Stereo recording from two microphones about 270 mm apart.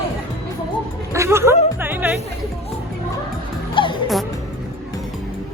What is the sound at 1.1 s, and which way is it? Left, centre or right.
Music, centre.